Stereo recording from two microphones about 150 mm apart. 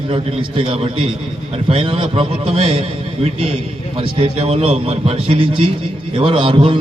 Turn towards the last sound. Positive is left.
turn(degrees=-35)  # may be behind; listen again after turning